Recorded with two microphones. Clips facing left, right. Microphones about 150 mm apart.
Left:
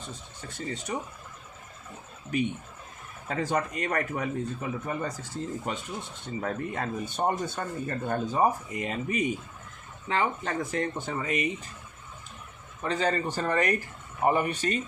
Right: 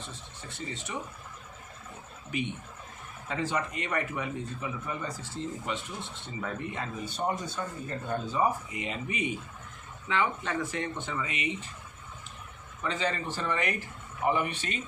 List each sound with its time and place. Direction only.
0.9 s speech: 40° left (ahead or behind)
3.2 s speech: 45° left (ahead or behind)
12.8 s speech: 45° left (ahead or behind)